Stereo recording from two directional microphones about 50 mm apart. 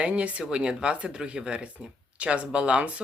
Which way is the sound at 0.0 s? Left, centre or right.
Right.